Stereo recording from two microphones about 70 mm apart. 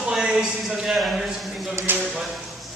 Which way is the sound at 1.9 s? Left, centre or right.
Right.